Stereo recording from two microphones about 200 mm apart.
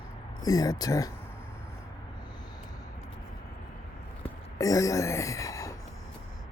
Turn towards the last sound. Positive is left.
turn(degrees=15)  # may be behind; listen again after turning